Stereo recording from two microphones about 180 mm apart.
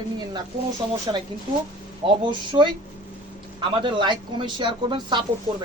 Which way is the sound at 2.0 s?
25° right (ahead or behind).